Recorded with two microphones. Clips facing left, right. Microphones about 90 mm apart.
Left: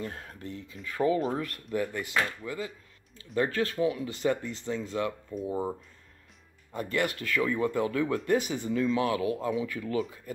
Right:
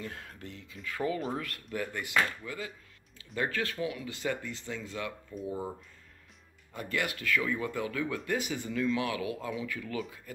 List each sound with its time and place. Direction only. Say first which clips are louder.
0.0 s speech: left 4 dB; 35° left (ahead or behind)
6.7 s speech: left 4 dB; 35° left (ahead or behind)